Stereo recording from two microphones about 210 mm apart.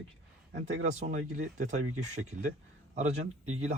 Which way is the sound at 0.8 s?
35° right (ahead or behind).